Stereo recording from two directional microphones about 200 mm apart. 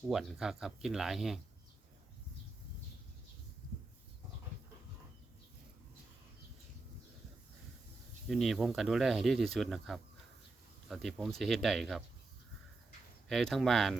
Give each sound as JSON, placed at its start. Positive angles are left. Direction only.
{"t": 0.1, "sound": "speech", "side_deg": 0}
{"t": 8.3, "sound": "speech", "side_deg": 0}
{"t": 13.2, "sound": "speech", "side_deg": 0}